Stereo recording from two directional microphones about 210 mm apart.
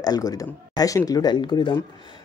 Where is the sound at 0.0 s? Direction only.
15° left (ahead or behind).